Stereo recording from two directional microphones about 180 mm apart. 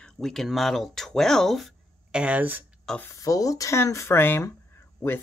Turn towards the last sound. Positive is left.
turn(degrees=10)  # may be behind; listen again after turning